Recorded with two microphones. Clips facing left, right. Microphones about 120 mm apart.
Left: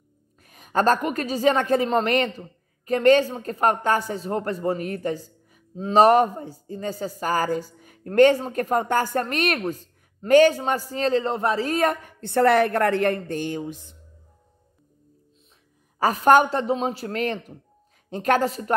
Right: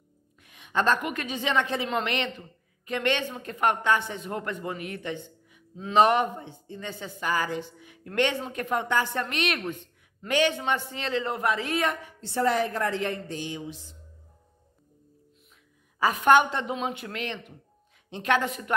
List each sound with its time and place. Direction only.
0.4 s speech: 40° left (ahead or behind)
16.0 s speech: 40° left (ahead or behind)